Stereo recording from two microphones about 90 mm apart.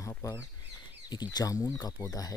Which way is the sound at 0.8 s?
50° left (ahead or behind).